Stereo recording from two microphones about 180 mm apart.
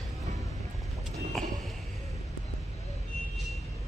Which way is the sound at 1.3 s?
Centre (ahead or behind).